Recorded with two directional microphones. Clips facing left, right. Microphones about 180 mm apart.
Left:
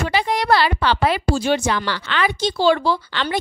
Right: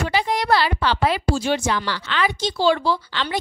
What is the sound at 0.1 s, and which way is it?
A woman's voice, 65° left (ahead or behind).